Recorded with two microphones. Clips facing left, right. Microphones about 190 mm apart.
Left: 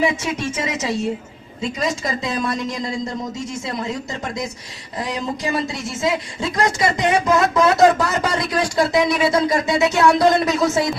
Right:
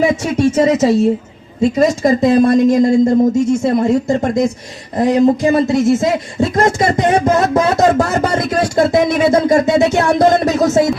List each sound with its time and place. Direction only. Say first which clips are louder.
0.0 s speech: right 8 dB; 45° right (ahead or behind)